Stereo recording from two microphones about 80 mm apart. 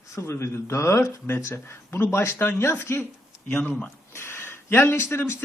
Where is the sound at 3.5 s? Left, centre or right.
Centre.